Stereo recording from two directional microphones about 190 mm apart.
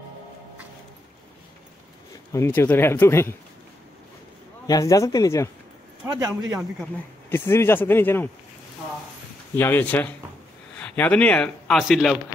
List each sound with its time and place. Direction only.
2.3 s speech: 15° left (ahead or behind)
4.6 s speech: 15° left (ahead or behind)
6.0 s speech: 15° right (ahead or behind)
7.2 s speech: 10° left (ahead or behind)
9.6 s speech: 10° left (ahead or behind)